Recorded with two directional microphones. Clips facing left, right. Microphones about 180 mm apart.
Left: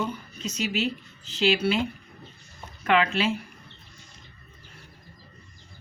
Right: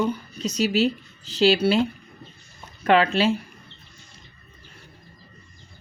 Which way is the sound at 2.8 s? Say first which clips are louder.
Right 4 dB; 35° right (ahead or behind).